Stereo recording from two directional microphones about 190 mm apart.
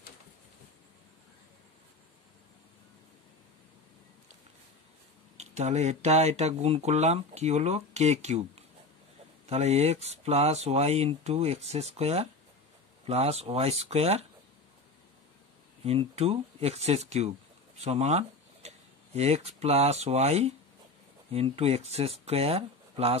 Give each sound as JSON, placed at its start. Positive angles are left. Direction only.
{"t": 5.4, "sound": "speech", "side_deg": -35}
{"t": 15.8, "sound": "speech", "side_deg": -30}
{"t": 17.7, "sound": "a sound", "side_deg": -35}
{"t": 19.1, "sound": "speech", "side_deg": -35}